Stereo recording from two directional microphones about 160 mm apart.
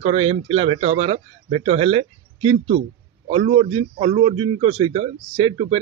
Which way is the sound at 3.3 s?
40° right (ahead or behind).